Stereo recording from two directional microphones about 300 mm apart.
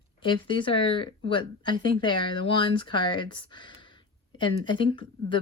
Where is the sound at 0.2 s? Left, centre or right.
Centre.